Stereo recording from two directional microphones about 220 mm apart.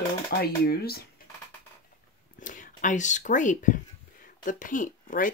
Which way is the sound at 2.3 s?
35° left (ahead or behind).